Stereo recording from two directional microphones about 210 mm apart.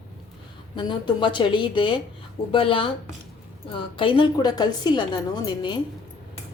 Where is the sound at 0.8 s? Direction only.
20° left (ahead or behind).